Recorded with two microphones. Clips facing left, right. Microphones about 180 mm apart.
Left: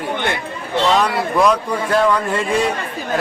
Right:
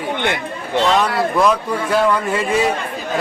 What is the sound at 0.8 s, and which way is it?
A man's voice, centre (ahead or behind).